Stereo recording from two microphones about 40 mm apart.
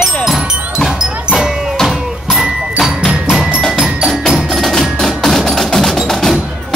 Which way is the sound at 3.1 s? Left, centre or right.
Right.